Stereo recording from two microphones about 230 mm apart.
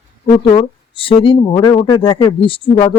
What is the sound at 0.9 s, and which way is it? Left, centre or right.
Speech, left.